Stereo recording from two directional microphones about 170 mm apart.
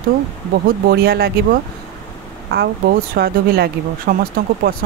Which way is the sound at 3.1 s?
65° right (ahead or behind).